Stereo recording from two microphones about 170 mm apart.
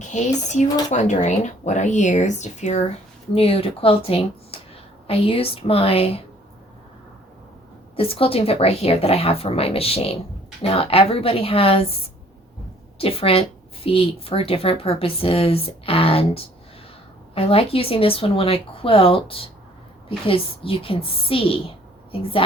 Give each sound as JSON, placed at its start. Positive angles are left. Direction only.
{"t": 0.1, "sound": "speech", "side_deg": 45}
{"t": 4.5, "sound": "a sound", "side_deg": 35}
{"t": 5.0, "sound": "speech", "side_deg": 35}
{"t": 7.9, "sound": "speech", "side_deg": 35}
{"t": 13.0, "sound": "speech", "side_deg": 35}